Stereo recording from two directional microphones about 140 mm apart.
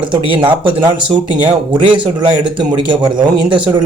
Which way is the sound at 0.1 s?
35° right (ahead or behind).